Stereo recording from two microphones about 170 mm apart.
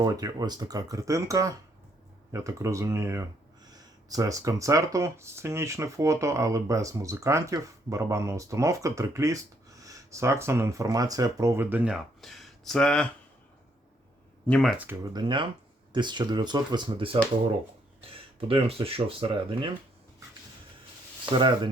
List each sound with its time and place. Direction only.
0.0 s speech: 20° right (ahead or behind)
12.2 s speech: centre (ahead or behind)
14.4 s speech: 5° left (ahead or behind)
15.1 s speech: 25° right (ahead or behind)
21.3 s speech: 30° right (ahead or behind)